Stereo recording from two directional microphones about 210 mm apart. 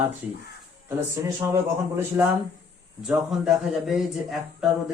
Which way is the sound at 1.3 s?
15° right (ahead or behind).